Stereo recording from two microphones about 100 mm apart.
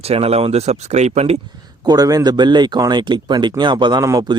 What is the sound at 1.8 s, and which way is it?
Speech, 40° right (ahead or behind).